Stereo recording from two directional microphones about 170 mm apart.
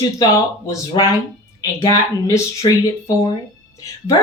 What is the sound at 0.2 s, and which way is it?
Speech, 25° left (ahead or behind).